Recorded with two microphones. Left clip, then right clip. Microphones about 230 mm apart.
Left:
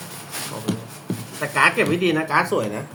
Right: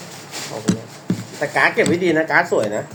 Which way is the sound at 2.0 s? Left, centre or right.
Centre.